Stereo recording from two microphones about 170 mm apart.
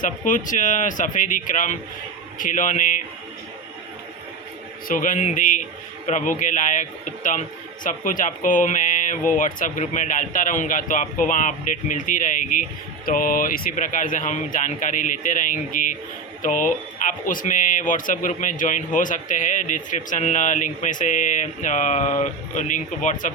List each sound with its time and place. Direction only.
0.0 s a man's voice: 50° left (ahead or behind)
4.9 s a man's voice: 50° left (ahead or behind)